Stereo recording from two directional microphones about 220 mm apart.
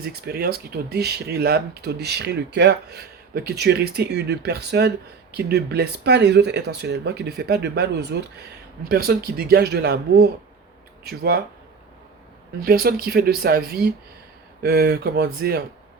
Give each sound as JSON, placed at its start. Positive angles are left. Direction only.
{"t": 0.0, "sound": "speech", "side_deg": -45}
{"t": 12.6, "sound": "speech", "side_deg": -45}